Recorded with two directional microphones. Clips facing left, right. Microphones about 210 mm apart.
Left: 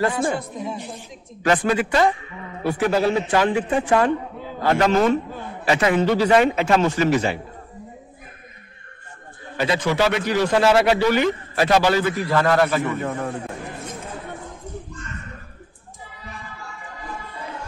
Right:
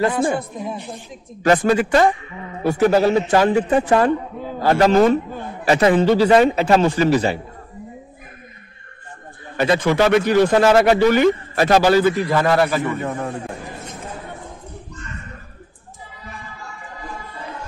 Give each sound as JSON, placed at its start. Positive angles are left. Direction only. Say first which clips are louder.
{"t": 0.1, "sound": "speech", "louder": "right 3 dB", "side_deg": -55}
{"t": 1.4, "sound": "a man's voice", "louder": "right 4 dB", "side_deg": -40}
{"t": 9.6, "sound": "speech", "louder": "right 4 dB", "side_deg": -50}
{"t": 12.2, "sound": "a man's voice", "louder": "right 2 dB", "side_deg": -10}